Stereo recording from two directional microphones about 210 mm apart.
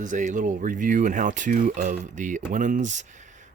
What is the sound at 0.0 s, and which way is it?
Speech, 35° right (ahead or behind).